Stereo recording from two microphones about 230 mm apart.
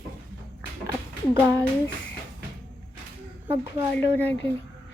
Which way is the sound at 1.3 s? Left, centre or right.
Centre.